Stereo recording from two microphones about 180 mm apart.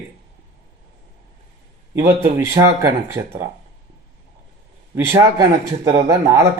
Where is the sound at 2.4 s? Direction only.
15° right (ahead or behind).